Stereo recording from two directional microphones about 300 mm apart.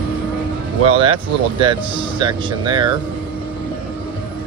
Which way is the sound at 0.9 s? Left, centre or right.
Centre.